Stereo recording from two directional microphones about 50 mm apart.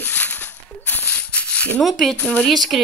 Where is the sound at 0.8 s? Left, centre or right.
Left.